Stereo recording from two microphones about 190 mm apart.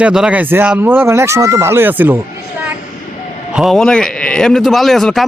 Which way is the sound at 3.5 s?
Centre (ahead or behind).